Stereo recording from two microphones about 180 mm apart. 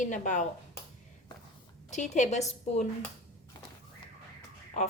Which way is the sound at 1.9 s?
40° left (ahead or behind).